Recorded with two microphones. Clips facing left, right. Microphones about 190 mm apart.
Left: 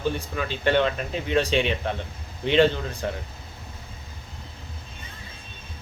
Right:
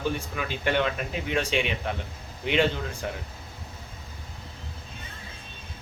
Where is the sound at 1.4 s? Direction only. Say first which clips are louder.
Left 5 dB; 35° left (ahead or behind).